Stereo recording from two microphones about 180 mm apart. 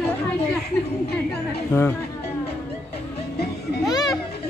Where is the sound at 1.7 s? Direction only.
10° left (ahead or behind).